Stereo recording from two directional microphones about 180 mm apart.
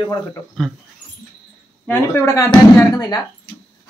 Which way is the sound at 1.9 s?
15° left (ahead or behind).